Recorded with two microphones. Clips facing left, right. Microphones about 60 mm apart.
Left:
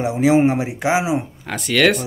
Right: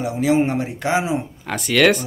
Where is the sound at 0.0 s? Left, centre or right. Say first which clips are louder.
Left 3 dB; centre.